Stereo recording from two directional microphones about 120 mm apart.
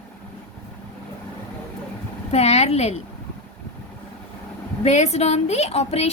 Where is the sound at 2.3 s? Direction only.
65° left (ahead or behind).